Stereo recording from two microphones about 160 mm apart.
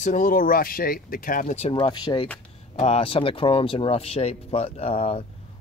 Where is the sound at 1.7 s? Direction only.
30° left (ahead or behind).